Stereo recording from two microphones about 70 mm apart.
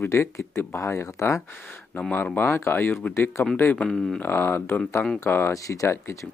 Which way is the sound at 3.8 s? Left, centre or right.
Centre.